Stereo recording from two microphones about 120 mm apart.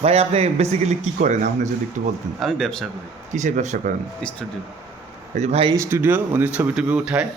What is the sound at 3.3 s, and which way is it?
Speech, 90° right.